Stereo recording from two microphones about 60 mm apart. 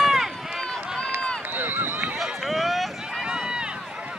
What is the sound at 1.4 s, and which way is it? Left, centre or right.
Run, right.